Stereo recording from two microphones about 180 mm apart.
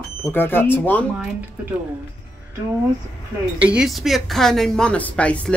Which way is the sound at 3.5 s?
5° right (ahead or behind).